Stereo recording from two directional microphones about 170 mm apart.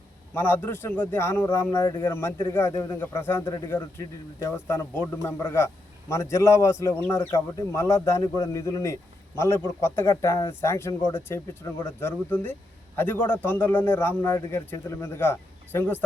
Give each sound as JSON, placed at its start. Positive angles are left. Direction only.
{"t": 0.3, "sound": "speech", "side_deg": 10}